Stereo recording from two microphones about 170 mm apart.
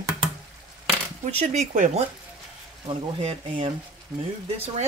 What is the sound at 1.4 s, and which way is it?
Speech, 45° right (ahead or behind).